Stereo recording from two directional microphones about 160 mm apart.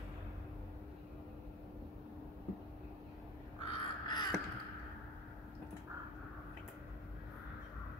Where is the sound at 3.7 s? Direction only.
30° left (ahead or behind).